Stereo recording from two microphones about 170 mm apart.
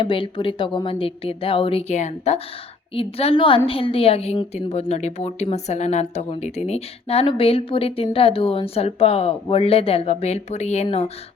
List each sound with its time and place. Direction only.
0.0 s a woman's voice: 30° left (ahead or behind)